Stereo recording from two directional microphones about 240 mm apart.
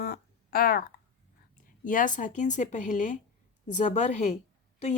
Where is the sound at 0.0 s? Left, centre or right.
Left.